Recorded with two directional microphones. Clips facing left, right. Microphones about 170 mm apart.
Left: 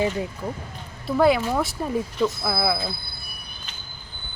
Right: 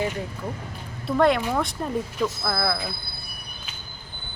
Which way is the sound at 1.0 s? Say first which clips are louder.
Left 1 dB; 5° left (ahead or behind).